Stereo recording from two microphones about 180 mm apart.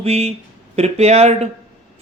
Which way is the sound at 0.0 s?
35° right (ahead or behind).